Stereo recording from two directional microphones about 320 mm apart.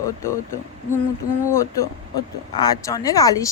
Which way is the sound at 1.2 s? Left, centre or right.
Left.